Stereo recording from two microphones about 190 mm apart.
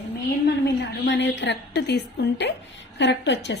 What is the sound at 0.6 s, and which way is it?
A woman's voice, 65° left (ahead or behind).